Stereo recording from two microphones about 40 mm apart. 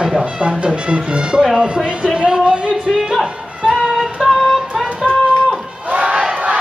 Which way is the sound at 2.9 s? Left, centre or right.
Centre.